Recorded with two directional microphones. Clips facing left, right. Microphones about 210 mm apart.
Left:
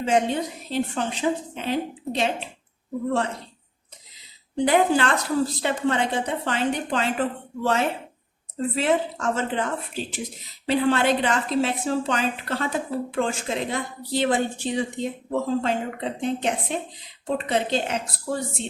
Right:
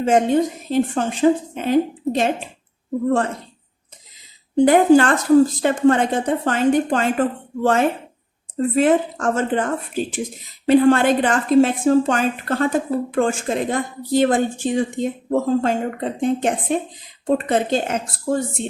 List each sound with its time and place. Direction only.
0.0 s a woman's voice: 45° right (ahead or behind)
4.5 s a woman's voice: 45° right (ahead or behind)